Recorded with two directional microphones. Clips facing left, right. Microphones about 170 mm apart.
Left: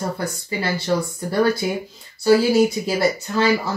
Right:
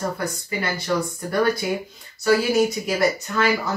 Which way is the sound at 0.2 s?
30° left (ahead or behind).